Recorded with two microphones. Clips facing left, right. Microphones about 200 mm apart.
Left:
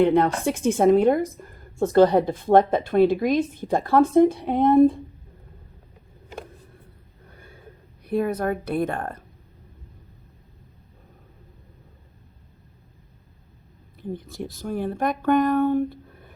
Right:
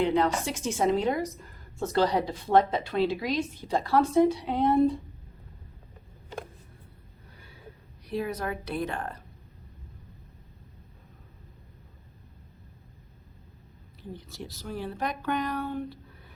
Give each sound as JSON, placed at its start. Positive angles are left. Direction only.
{"t": 0.0, "sound": "a woman's voice", "side_deg": 55}
{"t": 7.3, "sound": "a sound", "side_deg": 50}
{"t": 8.0, "sound": "a woman's voice", "side_deg": 55}
{"t": 14.0, "sound": "a woman's voice", "side_deg": 50}